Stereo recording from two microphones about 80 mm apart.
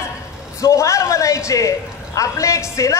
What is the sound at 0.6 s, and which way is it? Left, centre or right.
A man's voice, left.